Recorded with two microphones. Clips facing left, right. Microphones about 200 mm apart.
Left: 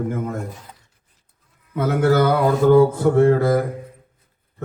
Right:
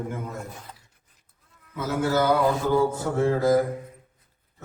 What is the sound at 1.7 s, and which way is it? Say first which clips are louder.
Mantra: left 7 dB; 60° left (ahead or behind).